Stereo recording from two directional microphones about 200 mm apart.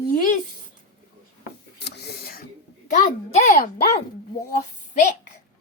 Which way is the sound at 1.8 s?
55° left (ahead or behind).